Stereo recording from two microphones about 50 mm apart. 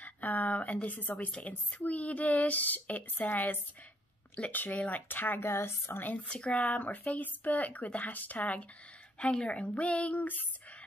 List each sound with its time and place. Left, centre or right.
0.0 s speech: left
0.8 s speech: left
1.1 s speech: left
5.0 s a woman's voice: left
6.0 s a woman's voice: left